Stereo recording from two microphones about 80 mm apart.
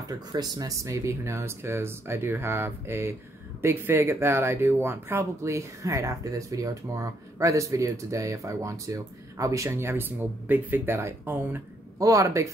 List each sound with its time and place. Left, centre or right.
0.1 s speech: right
12.0 s speech: right